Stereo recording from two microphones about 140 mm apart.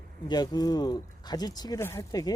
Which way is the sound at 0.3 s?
30° left (ahead or behind).